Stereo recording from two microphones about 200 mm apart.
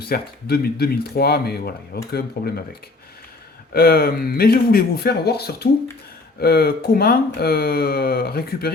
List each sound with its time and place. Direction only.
0.0 s speech: 50° left (ahead or behind)
3.7 s speech: 50° left (ahead or behind)